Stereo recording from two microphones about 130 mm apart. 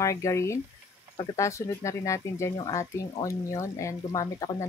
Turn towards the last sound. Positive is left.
turn(degrees=25)  # may be behind; listen again after turning